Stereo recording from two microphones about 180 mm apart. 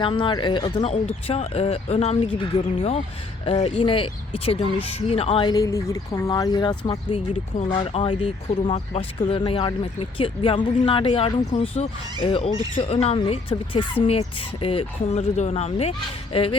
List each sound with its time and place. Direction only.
0.0 s speech: 30° left (ahead or behind)